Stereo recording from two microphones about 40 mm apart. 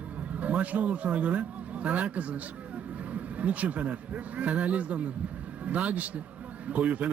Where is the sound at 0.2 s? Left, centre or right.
Right.